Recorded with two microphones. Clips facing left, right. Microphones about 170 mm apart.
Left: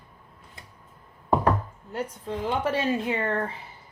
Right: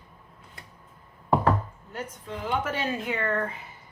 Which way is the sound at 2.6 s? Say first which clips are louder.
Left 4 dB; 30° left (ahead or behind).